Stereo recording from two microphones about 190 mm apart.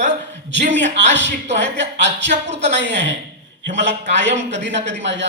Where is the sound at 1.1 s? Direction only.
70° right (ahead or behind).